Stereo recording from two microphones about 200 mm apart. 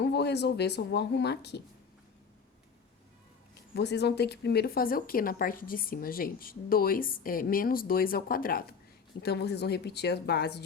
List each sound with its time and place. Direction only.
0.0 s a woman's voice: 55° left (ahead or behind)
3.8 s a woman's voice: 55° left (ahead or behind)